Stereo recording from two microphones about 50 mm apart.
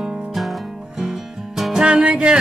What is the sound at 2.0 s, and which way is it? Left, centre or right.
Music, right.